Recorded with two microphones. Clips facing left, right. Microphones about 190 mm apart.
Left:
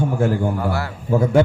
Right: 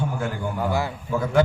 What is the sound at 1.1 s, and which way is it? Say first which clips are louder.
Speech: left 6 dB; 25° left (ahead or behind).